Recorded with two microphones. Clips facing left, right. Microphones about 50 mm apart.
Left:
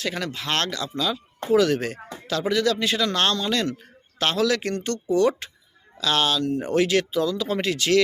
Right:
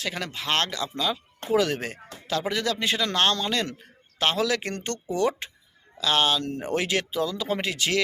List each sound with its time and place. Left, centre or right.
0.0 s speech: centre
4.7 s speech: right; by 8.0 s centre